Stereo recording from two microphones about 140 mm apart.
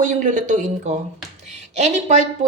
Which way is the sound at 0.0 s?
65° right (ahead or behind).